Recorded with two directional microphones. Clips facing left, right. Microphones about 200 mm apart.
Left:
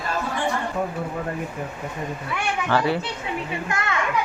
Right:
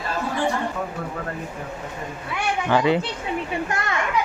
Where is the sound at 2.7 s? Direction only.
20° right (ahead or behind).